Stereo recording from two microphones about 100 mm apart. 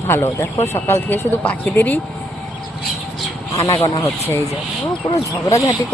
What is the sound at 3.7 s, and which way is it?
Speech, 60° left (ahead or behind).